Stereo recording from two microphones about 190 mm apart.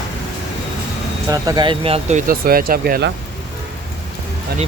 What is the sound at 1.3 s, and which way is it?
Speech, 20° right (ahead or behind).